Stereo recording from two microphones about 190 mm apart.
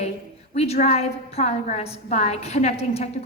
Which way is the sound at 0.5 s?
35° left (ahead or behind).